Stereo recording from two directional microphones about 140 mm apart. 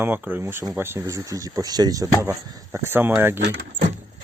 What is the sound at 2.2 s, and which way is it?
Speech, 15° right (ahead or behind).